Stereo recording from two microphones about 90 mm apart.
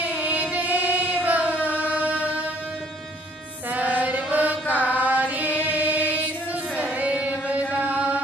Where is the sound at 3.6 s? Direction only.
15° right (ahead or behind).